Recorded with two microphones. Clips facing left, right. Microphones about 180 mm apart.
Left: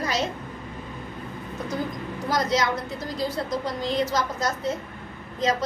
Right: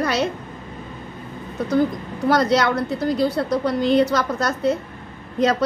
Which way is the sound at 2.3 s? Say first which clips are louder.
Right 6 dB; 65° right (ahead or behind).